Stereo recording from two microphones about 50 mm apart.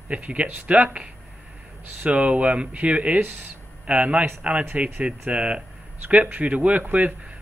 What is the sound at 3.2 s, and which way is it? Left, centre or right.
Speech, right.